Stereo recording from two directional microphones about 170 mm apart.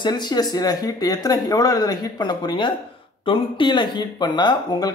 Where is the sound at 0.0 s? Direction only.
25° left (ahead or behind).